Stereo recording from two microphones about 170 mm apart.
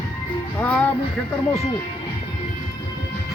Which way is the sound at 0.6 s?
10° left (ahead or behind).